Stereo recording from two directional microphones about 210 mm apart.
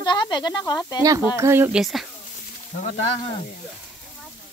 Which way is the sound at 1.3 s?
10° right (ahead or behind).